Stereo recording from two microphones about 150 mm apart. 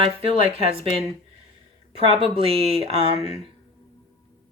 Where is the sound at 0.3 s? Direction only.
40° right (ahead or behind).